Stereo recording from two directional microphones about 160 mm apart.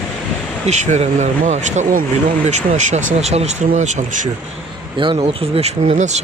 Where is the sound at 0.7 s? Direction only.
45° right (ahead or behind).